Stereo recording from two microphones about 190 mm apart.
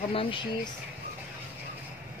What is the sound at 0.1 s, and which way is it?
Speech, 30° left (ahead or behind).